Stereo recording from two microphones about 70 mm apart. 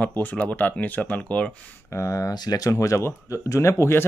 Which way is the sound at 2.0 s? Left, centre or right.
Left.